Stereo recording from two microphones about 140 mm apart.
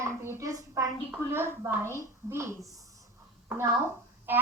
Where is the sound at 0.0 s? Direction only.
20° right (ahead or behind).